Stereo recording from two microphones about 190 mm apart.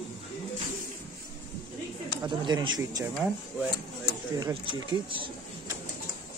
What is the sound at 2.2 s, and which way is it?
Speech, 25° right (ahead or behind).